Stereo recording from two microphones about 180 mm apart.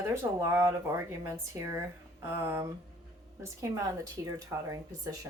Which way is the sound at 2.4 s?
15° right (ahead or behind).